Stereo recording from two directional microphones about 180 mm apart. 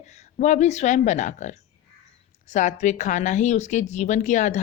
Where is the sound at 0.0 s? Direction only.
40° left (ahead or behind).